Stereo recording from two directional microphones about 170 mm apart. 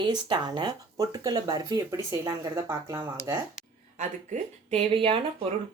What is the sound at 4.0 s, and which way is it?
Speech, 40° right (ahead or behind).